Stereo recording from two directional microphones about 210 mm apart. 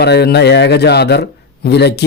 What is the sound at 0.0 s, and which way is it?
A man's voice, 50° left (ahead or behind).